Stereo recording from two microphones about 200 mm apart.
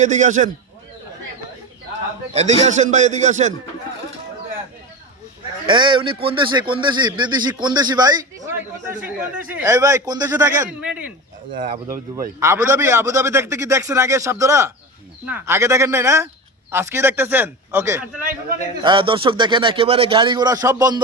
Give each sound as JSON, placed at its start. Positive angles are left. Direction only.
{"t": 0.0, "sound": "a man's voice", "side_deg": -35}
{"t": 2.3, "sound": "a man's voice", "side_deg": -35}
{"t": 5.6, "sound": "a man's voice", "side_deg": -25}
{"t": 11.5, "sound": "a man's voice", "side_deg": -40}
{"t": 12.4, "sound": "a man's voice", "side_deg": -15}
{"t": 18.8, "sound": "a man's voice", "side_deg": -25}